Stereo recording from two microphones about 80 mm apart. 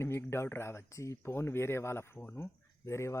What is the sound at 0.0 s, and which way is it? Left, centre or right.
Speech, left.